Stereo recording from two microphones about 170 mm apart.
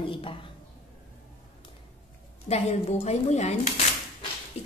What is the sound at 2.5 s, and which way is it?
A woman's voice, 40° left (ahead or behind).